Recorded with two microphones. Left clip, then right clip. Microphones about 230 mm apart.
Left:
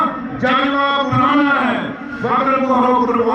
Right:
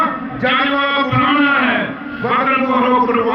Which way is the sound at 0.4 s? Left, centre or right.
Left.